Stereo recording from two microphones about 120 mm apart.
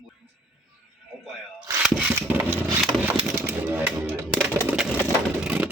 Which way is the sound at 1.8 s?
10° right (ahead or behind).